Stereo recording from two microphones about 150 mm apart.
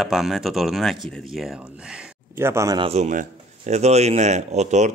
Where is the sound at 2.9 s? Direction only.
55° right (ahead or behind).